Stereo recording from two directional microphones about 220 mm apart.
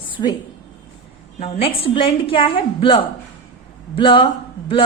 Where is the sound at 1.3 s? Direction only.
30° left (ahead or behind).